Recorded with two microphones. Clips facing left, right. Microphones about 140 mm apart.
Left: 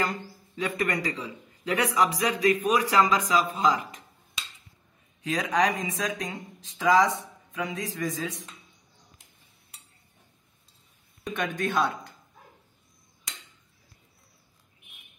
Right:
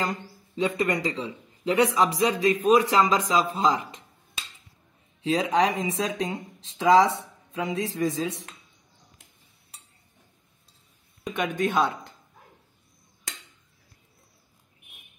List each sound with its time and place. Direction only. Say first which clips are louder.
0.6 s a man's voice: right 3 dB; 25° right (ahead or behind)
5.2 s a man's voice: right 3 dB; 30° right (ahead or behind)
11.3 s a man's voice: right 3 dB; 20° right (ahead or behind)